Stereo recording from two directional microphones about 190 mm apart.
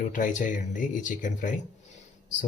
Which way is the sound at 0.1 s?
40° left (ahead or behind).